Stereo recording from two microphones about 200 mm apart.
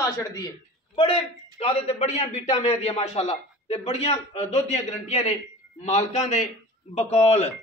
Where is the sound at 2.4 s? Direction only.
20° left (ahead or behind).